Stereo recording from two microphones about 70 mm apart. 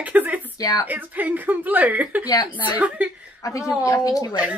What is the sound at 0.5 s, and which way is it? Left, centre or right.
Speech, left.